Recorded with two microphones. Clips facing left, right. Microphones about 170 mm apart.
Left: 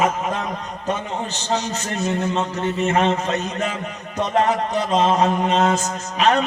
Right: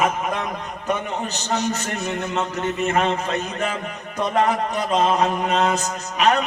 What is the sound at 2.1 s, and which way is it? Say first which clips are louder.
A man's voice: left 3 dB; 35° left (ahead or behind).